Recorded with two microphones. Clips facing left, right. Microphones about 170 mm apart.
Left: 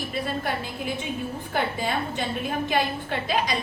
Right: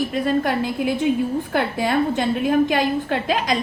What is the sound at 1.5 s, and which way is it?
Speech, 65° right (ahead or behind).